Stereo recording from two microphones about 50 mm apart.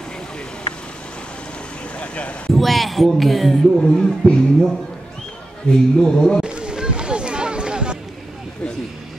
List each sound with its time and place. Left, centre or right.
2.0 s speech: left
2.5 s speech: centre
3.8 s speech: centre
5.9 s speech: centre
6.4 s a sound: centre